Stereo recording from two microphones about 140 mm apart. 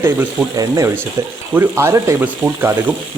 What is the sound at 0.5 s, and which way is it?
Speech, 25° right (ahead or behind).